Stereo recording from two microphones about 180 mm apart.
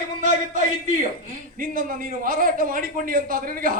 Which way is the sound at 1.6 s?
50° right (ahead or behind).